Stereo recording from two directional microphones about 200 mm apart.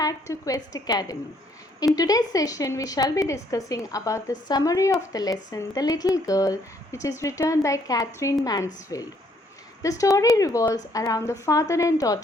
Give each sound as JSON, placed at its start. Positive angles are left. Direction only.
{"t": 0.0, "sound": "a woman's voice", "side_deg": 15}